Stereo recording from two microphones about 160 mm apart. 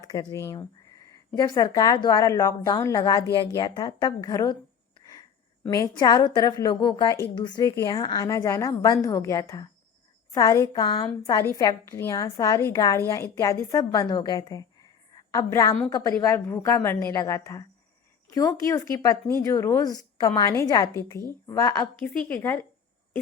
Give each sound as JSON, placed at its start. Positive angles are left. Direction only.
{"t": 0.0, "sound": "a woman's voice", "side_deg": 25}
{"t": 5.7, "sound": "a woman's voice", "side_deg": 25}
{"t": 21.9, "sound": "a woman's voice", "side_deg": 5}